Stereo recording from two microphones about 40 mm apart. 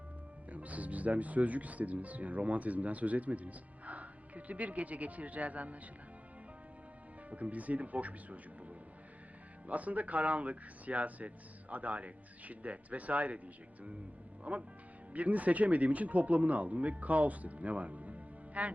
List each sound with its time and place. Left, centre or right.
0.5 s speech: right
7.3 s speech: right
9.6 s speech: right